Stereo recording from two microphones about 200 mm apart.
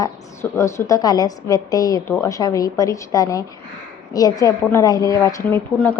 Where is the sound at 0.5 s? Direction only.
15° left (ahead or behind).